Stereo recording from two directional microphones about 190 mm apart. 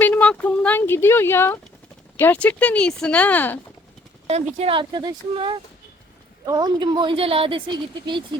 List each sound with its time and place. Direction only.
0.0 s speech: 10° left (ahead or behind)
4.3 s a woman's voice: 35° right (ahead or behind)